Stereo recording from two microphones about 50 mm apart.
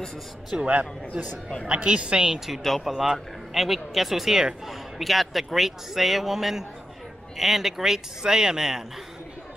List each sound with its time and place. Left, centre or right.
0.7 s a woman's voice: right
2.5 s speech: centre